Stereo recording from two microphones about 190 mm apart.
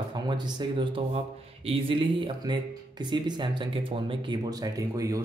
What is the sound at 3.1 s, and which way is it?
Speech, 25° right (ahead or behind).